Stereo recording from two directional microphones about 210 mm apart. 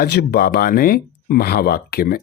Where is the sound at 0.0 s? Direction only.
50° left (ahead or behind).